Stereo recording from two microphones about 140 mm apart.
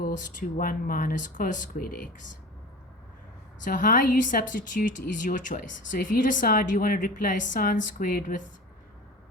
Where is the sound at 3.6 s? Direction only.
70° left (ahead or behind).